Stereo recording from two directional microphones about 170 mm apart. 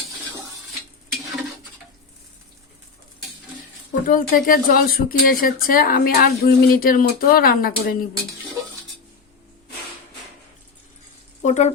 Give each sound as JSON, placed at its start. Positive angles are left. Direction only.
{"t": 4.0, "sound": "a woman's voice", "side_deg": 55}
{"t": 11.4, "sound": "speech", "side_deg": 40}